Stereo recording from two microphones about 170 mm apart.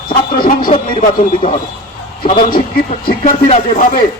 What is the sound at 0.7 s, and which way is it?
Speech, 45° left (ahead or behind).